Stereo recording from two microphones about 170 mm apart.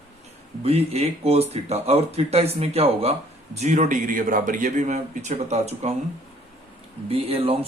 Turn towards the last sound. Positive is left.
turn(degrees=-35)  # may be behind; listen again after turning